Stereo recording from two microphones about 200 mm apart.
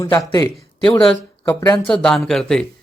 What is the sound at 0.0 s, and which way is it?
Speech, 15° left (ahead or behind).